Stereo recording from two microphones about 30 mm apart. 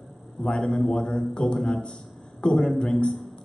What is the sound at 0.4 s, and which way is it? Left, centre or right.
A man's voice, left.